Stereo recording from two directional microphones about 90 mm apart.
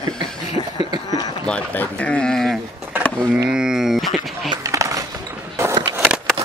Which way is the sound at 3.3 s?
10° right (ahead or behind).